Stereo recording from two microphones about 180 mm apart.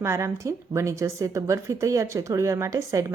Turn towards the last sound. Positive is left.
turn(degrees=-20)  # may be behind; listen again after turning